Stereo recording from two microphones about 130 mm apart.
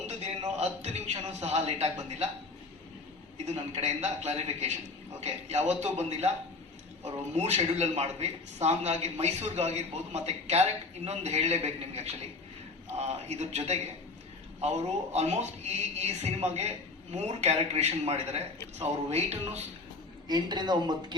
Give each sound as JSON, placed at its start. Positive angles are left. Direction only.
{"t": 0.4, "sound": "a man's voice", "side_deg": -60}
{"t": 3.3, "sound": "speech", "side_deg": -60}
{"t": 20.2, "sound": "speech", "side_deg": -35}